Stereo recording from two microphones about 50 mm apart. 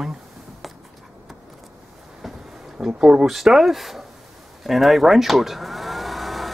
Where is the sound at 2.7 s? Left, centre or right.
Centre.